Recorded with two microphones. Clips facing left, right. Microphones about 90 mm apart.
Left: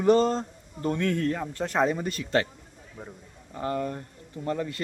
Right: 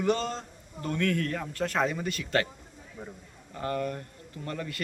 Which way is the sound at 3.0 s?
15° left (ahead or behind).